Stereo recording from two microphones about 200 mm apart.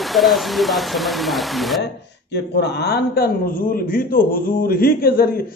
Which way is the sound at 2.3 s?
55° left (ahead or behind).